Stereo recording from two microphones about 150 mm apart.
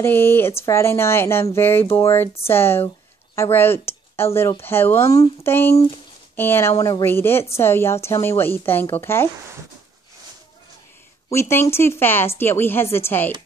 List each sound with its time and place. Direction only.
0.0 s speech: 15° left (ahead or behind)
11.2 s speech: 20° left (ahead or behind)